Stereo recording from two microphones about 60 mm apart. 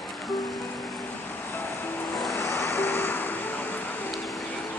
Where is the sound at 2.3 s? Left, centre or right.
Left.